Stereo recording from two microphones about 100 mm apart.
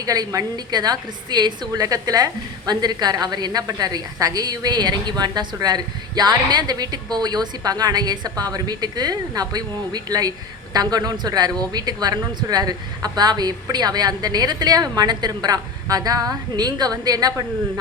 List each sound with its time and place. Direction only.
0.0 s a woman's voice: 35° right (ahead or behind)